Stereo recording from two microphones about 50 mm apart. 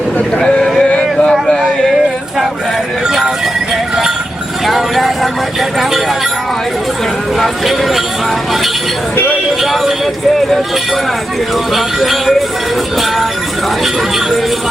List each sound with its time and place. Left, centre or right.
0.3 s speech: centre
0.8 s a sound: left
1.3 s a sound: centre
3.1 s music: centre
4.6 s speech: centre
7.3 s speech: centre
9.6 s speech: centre
11.7 s speech: centre